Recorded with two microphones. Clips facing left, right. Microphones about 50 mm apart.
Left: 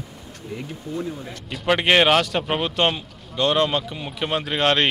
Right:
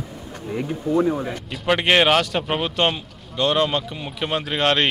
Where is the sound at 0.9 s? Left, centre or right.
Right.